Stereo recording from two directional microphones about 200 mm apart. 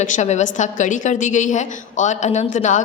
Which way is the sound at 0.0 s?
35° left (ahead or behind).